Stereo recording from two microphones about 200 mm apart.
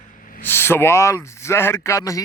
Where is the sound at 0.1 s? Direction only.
40° left (ahead or behind).